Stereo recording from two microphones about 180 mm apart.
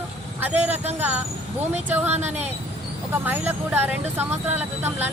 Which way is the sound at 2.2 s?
40° right (ahead or behind).